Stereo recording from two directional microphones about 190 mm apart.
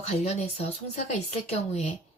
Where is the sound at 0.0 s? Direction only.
35° left (ahead or behind).